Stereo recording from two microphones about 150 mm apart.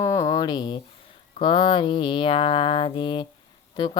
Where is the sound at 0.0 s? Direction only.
20° left (ahead or behind).